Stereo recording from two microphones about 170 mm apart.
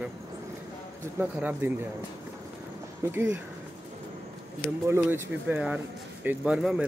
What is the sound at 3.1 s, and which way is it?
Speech, 15° right (ahead or behind).